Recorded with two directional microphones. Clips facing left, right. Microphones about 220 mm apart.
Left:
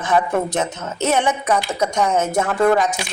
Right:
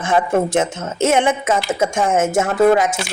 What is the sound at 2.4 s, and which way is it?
Speech, 20° right (ahead or behind).